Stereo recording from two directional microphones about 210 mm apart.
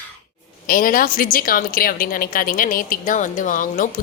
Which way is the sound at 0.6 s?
45° left (ahead or behind).